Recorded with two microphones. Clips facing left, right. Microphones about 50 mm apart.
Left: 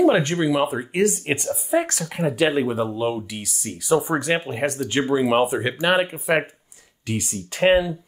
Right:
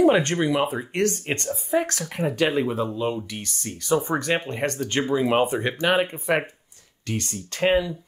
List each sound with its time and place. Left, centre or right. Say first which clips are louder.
0.0 s speech: left 1 dB; centre